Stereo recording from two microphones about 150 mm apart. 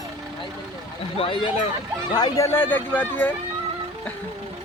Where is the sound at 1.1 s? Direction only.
35° left (ahead or behind).